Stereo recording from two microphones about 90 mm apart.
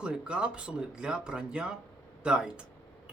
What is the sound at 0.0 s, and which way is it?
Speech, 10° right (ahead or behind).